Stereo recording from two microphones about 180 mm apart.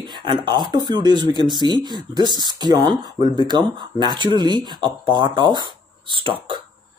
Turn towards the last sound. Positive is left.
turn(degrees=-30)  # may be behind; listen again after turning